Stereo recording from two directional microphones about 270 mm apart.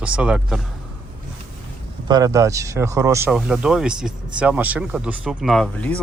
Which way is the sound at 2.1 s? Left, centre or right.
Centre.